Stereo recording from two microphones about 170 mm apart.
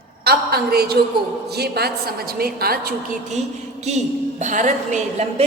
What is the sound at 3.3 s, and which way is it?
A woman's voice, 40° right (ahead or behind).